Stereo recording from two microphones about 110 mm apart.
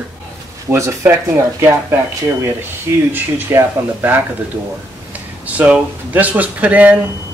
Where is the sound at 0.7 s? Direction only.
25° right (ahead or behind).